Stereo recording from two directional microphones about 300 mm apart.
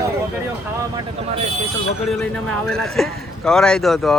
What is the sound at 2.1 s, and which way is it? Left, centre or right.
A man's voice, centre.